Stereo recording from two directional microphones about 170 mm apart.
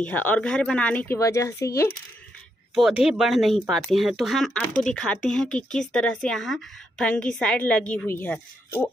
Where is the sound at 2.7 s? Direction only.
5° right (ahead or behind).